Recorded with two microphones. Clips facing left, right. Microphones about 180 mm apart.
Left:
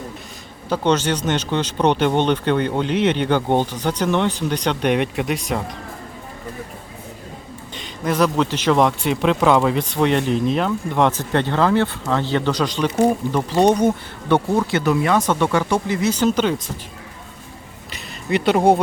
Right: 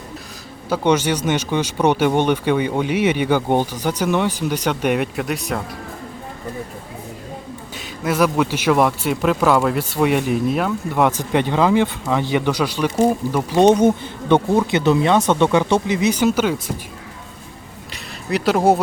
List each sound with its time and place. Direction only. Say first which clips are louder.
0.7 s a man's voice: right 1 dB; 10° right (ahead or behind)
7.8 s a man's voice: right 1 dB; 5° right (ahead or behind)
13.8 s speech: right 3 dB; 20° right (ahead or behind)
17.9 s a sound: left 1 dB; centre (ahead or behind)